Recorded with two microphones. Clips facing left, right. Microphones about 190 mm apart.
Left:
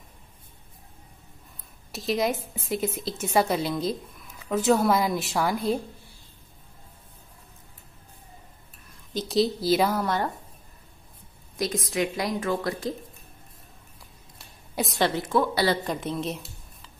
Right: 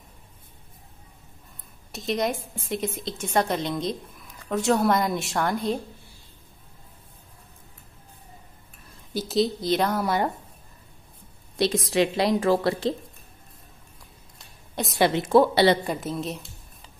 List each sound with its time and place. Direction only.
1.9 s a woman's voice: centre (ahead or behind)
9.1 s a woman's voice: 5° right (ahead or behind)
11.5 s a woman's voice: 30° right (ahead or behind)
15.0 s a woman's voice: 15° right (ahead or behind)
15.2 s speech: 30° right (ahead or behind)
15.8 s a woman's voice: 5° right (ahead or behind)